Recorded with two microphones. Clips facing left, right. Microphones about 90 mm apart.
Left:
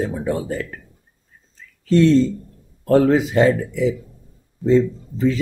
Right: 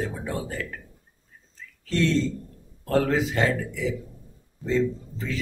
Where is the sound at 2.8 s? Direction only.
25° left (ahead or behind).